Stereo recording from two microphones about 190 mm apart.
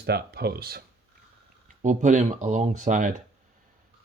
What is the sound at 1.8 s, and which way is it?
Speech, 40° right (ahead or behind).